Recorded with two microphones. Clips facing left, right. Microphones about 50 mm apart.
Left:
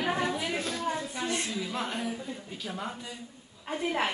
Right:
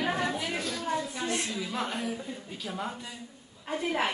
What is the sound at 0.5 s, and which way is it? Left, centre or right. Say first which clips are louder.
Speech: even; left.